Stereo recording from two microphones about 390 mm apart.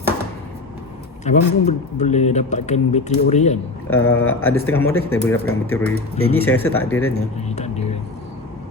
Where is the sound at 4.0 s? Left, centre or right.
Left.